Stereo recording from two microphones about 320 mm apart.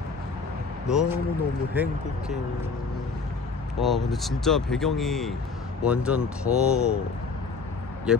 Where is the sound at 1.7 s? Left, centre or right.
Centre.